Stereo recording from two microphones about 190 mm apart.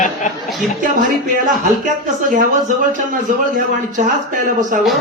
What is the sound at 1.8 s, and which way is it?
Speech, 45° right (ahead or behind).